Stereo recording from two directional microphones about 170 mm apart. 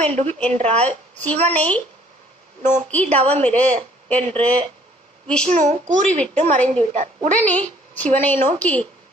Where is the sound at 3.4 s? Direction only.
10° left (ahead or behind).